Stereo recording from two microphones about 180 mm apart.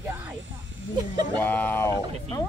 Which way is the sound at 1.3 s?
10° left (ahead or behind).